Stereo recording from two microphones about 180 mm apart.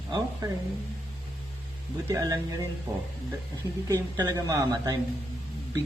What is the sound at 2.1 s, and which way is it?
Speech, 20° right (ahead or behind).